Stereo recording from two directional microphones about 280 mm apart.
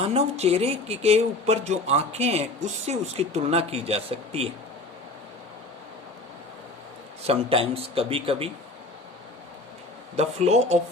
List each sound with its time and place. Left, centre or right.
0.0 s speech: right
7.3 s speech: centre
10.2 s speech: right